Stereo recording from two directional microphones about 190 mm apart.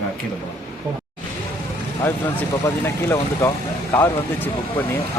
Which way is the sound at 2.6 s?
10° left (ahead or behind).